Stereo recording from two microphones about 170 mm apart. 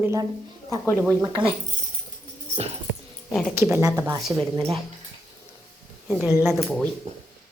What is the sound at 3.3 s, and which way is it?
Speech, centre (ahead or behind).